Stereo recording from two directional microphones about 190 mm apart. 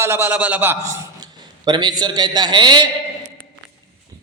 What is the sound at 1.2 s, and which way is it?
A man's voice, 25° right (ahead or behind).